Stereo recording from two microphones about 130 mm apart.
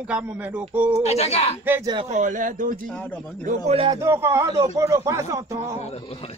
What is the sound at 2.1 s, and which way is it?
Speech, 85° right.